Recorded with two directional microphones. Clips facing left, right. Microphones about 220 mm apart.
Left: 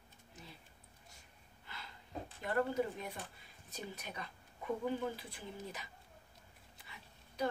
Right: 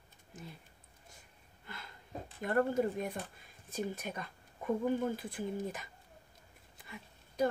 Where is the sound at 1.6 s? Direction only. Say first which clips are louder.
Right 3 dB; 50° right (ahead or behind).